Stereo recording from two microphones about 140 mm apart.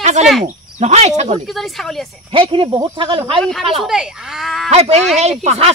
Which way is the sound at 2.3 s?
40° right (ahead or behind).